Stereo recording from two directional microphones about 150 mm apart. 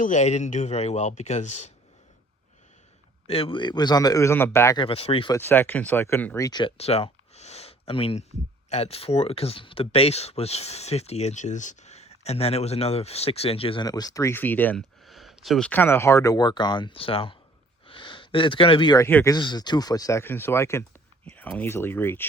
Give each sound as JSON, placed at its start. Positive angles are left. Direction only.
{"t": 0.0, "sound": "speech", "side_deg": 50}
{"t": 3.2, "sound": "speech", "side_deg": 40}
{"t": 4.8, "sound": "speech", "side_deg": 40}
{"t": 5.3, "sound": "speech", "side_deg": 15}
{"t": 13.8, "sound": "speech", "side_deg": 25}
{"t": 15.0, "sound": "speech", "side_deg": 0}
{"t": 17.8, "sound": "a sound", "side_deg": 35}
{"t": 19.0, "sound": "speech", "side_deg": 20}
{"t": 19.4, "sound": "speech", "side_deg": 30}